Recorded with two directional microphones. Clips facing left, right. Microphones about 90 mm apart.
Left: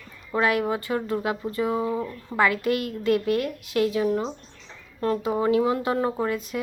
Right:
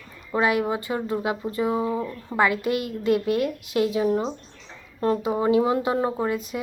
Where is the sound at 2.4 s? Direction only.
20° right (ahead or behind).